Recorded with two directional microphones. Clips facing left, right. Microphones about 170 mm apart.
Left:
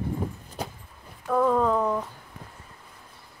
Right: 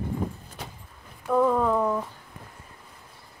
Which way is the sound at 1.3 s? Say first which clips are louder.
Even; 5° right (ahead or behind).